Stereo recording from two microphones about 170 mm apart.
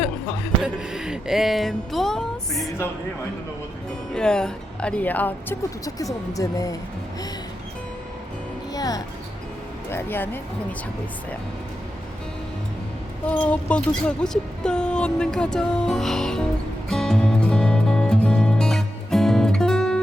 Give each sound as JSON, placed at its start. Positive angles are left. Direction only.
{"t": 0.6, "sound": "speech", "side_deg": -5}
{"t": 4.1, "sound": "speech", "side_deg": 5}
{"t": 8.7, "sound": "music", "side_deg": 20}
{"t": 9.9, "sound": "speech", "side_deg": 10}
{"t": 13.2, "sound": "speech", "side_deg": 5}
{"t": 16.9, "sound": "music", "side_deg": 5}